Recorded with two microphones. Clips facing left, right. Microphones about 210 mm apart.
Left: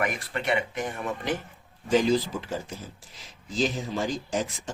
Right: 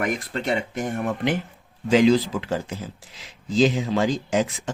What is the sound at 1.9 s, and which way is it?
Speech, 90° right.